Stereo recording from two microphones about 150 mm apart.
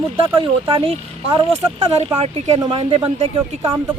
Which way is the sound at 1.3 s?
30° right (ahead or behind).